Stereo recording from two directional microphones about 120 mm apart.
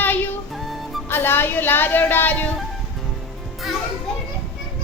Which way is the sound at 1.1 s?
20° left (ahead or behind).